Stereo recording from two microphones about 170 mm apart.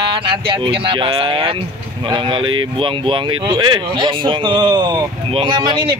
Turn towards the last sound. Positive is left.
turn(degrees=-30)  # may be behind; listen again after turning